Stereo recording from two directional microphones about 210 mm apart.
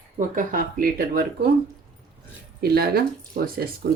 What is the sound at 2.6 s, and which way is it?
Speech, 50° right (ahead or behind).